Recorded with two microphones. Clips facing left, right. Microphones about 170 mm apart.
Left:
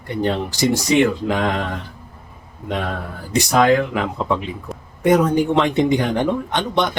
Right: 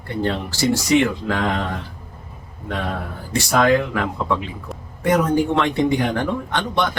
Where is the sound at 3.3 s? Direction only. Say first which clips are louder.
Left 2 dB; 20° left (ahead or behind).